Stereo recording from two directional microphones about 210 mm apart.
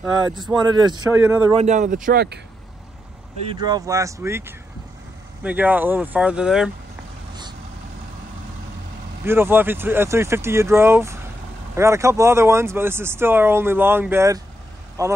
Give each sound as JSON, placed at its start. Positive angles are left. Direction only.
{"t": 0.7, "sound": "a man's voice", "side_deg": -20}
{"t": 1.1, "sound": "speech", "side_deg": -10}
{"t": 1.5, "sound": "speech", "side_deg": -35}
{"t": 2.0, "sound": "speech", "side_deg": -50}
{"t": 3.5, "sound": "speech", "side_deg": -20}
{"t": 9.2, "sound": "speech", "side_deg": -10}